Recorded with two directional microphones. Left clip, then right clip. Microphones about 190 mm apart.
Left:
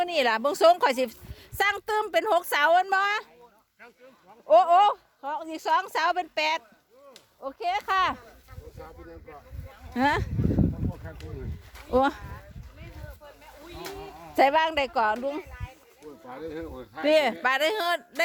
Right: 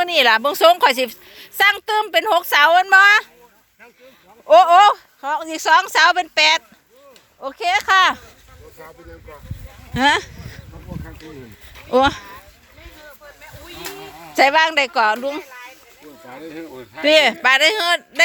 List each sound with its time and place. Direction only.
0.0 s a woman's voice: 10° left (ahead or behind)
4.4 s speech: centre (ahead or behind)
7.4 s speech: centre (ahead or behind)
9.9 s speech: 5° left (ahead or behind)
11.7 s a sound: centre (ahead or behind)
13.8 s a sound: 25° right (ahead or behind)
14.3 s a woman's voice: 10° left (ahead or behind)
16.6 s a woman's voice: 10° left (ahead or behind)